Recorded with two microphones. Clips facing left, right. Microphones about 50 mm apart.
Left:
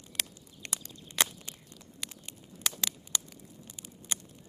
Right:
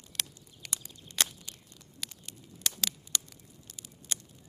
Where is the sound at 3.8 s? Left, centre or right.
Centre.